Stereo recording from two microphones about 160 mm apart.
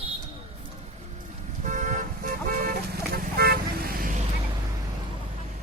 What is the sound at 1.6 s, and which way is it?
Vehicle, 50° right (ahead or behind).